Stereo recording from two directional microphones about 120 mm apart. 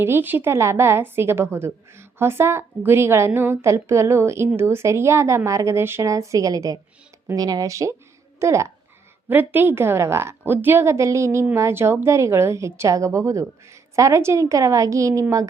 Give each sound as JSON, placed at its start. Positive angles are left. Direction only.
{"t": 0.0, "sound": "a woman's voice", "side_deg": -15}